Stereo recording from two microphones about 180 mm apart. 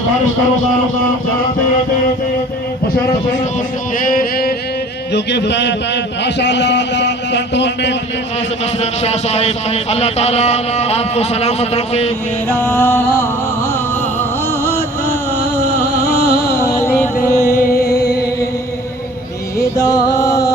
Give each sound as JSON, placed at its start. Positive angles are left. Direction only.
{"t": 3.9, "sound": "music", "side_deg": 50}
{"t": 5.1, "sound": "a man's voice", "side_deg": 70}
{"t": 8.8, "sound": "a man's voice", "side_deg": 35}
{"t": 12.5, "sound": "music", "side_deg": 10}
{"t": 16.0, "sound": "a sound", "side_deg": 60}
{"t": 16.5, "sound": "music", "side_deg": 15}
{"t": 17.4, "sound": "music", "side_deg": 55}
{"t": 19.7, "sound": "music", "side_deg": 20}